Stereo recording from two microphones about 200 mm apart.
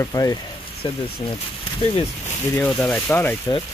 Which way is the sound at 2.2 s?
10° left (ahead or behind).